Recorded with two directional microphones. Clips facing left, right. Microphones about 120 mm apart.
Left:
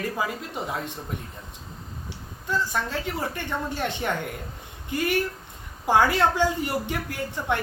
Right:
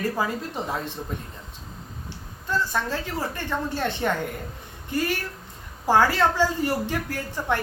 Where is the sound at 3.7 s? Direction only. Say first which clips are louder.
Right 3 dB; 15° left (ahead or behind).